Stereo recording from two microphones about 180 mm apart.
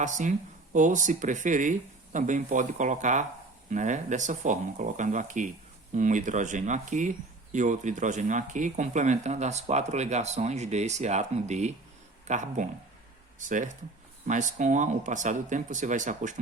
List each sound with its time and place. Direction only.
0.0 s speech: 45° right (ahead or behind)